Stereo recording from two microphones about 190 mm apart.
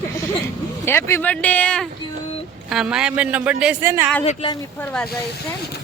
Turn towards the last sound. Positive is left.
turn(degrees=5)  # may be behind; listen again after turning